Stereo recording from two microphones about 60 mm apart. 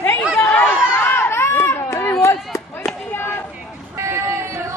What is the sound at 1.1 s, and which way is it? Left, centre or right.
Run, left.